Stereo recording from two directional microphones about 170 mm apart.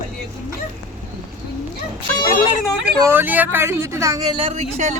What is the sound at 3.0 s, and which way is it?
Speech, 15° right (ahead or behind).